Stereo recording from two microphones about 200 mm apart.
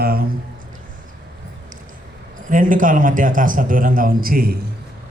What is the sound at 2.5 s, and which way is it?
A man's voice, 40° right (ahead or behind).